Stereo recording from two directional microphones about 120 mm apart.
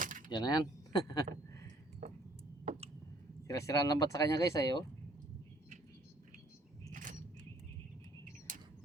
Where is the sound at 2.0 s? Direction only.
85° right.